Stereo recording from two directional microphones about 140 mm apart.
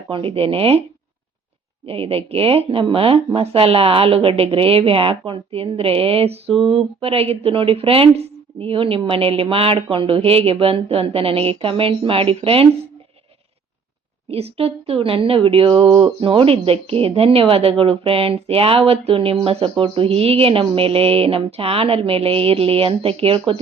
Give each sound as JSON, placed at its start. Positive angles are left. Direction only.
{"t": 0.1, "sound": "speech", "side_deg": -40}
{"t": 1.9, "sound": "speech", "side_deg": -45}
{"t": 14.3, "sound": "speech", "side_deg": -45}